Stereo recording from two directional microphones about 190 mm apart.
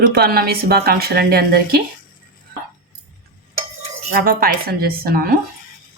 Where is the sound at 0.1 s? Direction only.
55° right (ahead or behind).